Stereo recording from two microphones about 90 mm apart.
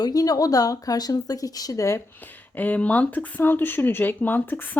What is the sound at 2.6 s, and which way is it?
Speech, 15° left (ahead or behind).